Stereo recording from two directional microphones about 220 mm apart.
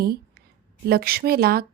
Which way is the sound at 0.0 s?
45° right (ahead or behind).